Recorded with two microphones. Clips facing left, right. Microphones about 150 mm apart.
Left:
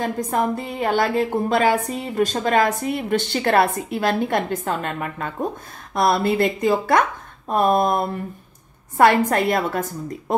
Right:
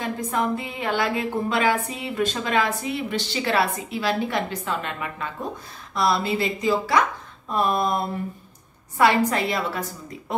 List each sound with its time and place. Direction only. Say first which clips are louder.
0.0 s a woman's voice: left 3 dB; 45° left (ahead or behind)